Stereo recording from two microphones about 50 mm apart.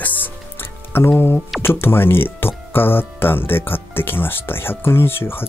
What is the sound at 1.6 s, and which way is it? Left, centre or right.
Speech, left.